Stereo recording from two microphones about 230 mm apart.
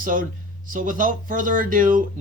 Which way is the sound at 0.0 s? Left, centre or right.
Right.